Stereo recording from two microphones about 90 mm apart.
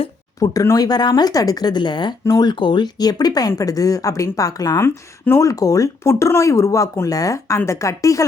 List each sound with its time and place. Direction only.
0.3 s speech: 40° left (ahead or behind)